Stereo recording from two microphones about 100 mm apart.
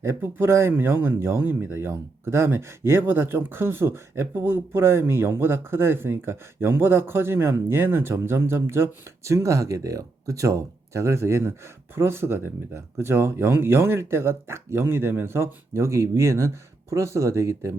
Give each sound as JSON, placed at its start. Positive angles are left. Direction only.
{"t": 0.0, "sound": "speech", "side_deg": -25}